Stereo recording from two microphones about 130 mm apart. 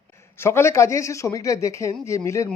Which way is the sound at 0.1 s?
20° left (ahead or behind).